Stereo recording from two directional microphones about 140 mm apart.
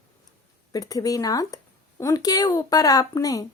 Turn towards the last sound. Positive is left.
turn(degrees=25)  # may be behind; listen again after turning